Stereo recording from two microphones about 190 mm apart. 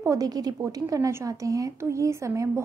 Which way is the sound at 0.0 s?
20° right (ahead or behind).